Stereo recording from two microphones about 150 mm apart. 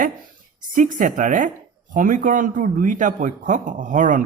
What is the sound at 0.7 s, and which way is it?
Speech, 60° right (ahead or behind).